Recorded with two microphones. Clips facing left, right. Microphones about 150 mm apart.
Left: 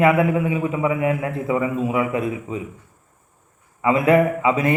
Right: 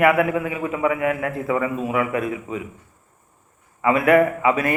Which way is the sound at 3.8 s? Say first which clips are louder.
Even; 20° left (ahead or behind).